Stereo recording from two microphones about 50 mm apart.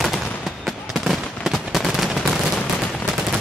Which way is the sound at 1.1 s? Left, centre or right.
Centre.